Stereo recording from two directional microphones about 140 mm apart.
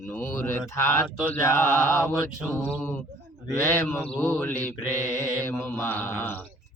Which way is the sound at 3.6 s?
15° left (ahead or behind).